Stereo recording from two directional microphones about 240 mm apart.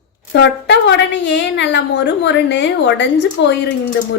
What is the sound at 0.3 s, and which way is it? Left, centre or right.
Speech, left.